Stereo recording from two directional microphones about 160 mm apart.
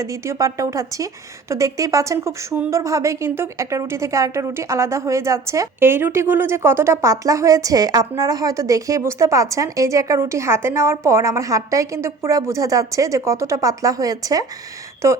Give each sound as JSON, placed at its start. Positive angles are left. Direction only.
{"t": 0.0, "sound": "a woman's voice", "side_deg": -20}